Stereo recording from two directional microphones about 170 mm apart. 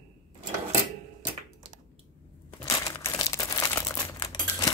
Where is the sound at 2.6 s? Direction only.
20° left (ahead or behind).